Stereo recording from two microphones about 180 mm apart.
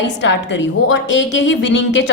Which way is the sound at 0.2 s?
85° left.